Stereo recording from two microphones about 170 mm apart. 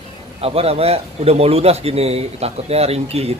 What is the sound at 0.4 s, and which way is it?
A man's voice, 35° right (ahead or behind).